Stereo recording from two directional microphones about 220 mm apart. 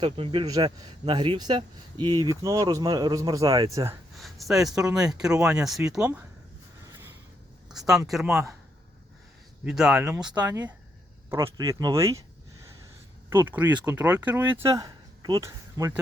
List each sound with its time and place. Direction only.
0.0 s speech: 20° right (ahead or behind)
4.2 s speech: centre (ahead or behind)
6.8 s a sound: 10° right (ahead or behind)
8.1 s speech: 5° right (ahead or behind)
9.6 s speech: centre (ahead or behind)
13.3 s speech: 10° right (ahead or behind)